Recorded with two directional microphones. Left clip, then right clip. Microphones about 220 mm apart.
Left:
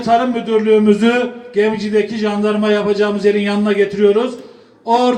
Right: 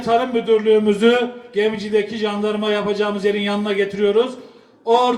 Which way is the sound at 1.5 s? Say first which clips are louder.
Left 4 dB; 45° left (ahead or behind).